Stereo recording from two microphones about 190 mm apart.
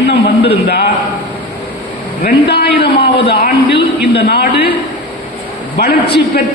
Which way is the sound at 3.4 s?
60° left (ahead or behind).